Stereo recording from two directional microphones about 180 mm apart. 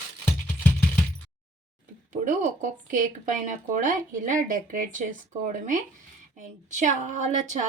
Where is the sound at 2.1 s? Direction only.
45° right (ahead or behind).